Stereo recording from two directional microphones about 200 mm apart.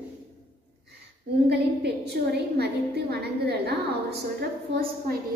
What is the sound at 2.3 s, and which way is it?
A woman's voice, 55° right (ahead or behind).